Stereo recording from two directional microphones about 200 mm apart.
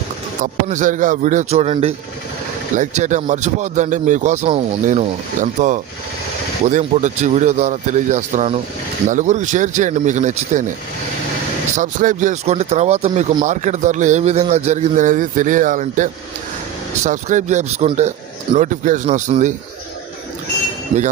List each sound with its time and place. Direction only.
0.4 s a man's voice: 40° right (ahead or behind)
11.8 s a man's voice: 40° right (ahead or behind)